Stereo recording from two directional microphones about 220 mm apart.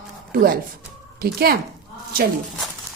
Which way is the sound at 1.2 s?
45° right (ahead or behind).